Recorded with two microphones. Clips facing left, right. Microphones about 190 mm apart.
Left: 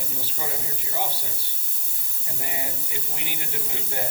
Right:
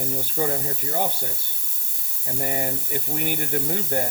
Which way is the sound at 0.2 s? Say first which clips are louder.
Right 8 dB; 50° right (ahead or behind).